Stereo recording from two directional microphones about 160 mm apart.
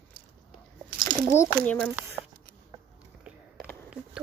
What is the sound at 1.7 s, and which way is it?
Speech, 5° left (ahead or behind).